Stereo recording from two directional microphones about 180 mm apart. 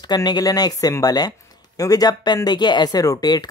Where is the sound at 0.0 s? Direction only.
20° left (ahead or behind).